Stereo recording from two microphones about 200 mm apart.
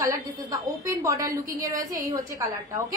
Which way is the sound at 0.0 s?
15° right (ahead or behind).